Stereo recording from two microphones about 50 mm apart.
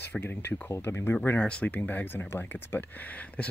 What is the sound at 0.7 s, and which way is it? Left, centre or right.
Speech, left.